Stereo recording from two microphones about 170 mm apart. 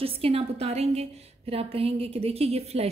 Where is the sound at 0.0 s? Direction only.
35° right (ahead or behind).